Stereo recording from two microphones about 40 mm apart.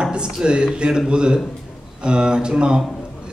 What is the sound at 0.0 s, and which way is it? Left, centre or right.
A man's voice, right.